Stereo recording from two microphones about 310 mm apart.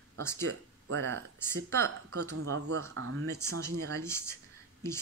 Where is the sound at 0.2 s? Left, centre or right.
Centre.